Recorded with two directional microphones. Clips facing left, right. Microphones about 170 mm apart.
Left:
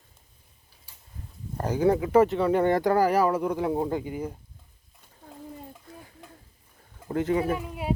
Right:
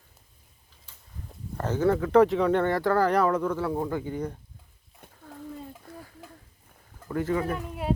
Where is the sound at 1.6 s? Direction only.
15° left (ahead or behind).